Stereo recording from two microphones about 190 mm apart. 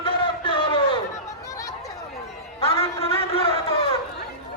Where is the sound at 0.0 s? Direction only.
25° left (ahead or behind).